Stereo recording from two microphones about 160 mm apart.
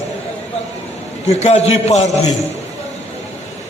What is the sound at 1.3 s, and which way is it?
Speech, 40° left (ahead or behind).